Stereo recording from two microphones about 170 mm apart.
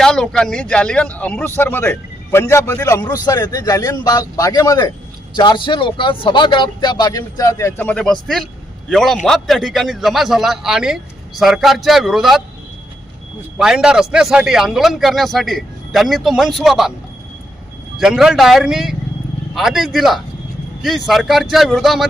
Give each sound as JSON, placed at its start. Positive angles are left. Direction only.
{"t": 0.0, "sound": "a man's voice", "side_deg": 5}
{"t": 13.6, "sound": "a man's voice", "side_deg": -5}
{"t": 17.9, "sound": "a man's voice", "side_deg": -5}